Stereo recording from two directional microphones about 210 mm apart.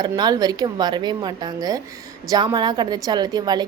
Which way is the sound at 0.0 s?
20° right (ahead or behind).